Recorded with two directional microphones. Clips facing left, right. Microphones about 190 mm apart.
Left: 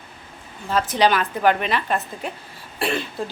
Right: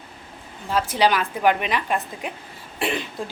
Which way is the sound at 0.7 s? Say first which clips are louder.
Left 1 dB; 10° right (ahead or behind).